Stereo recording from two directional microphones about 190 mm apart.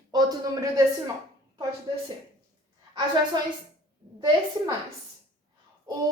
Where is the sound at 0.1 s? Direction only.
20° right (ahead or behind).